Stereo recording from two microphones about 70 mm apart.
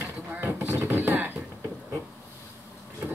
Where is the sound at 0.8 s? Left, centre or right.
Right.